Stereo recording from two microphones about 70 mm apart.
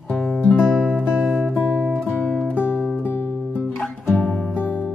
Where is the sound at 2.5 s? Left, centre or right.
Left.